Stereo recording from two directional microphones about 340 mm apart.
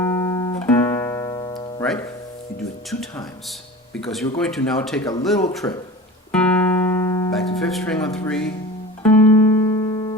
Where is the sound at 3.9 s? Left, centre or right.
Centre.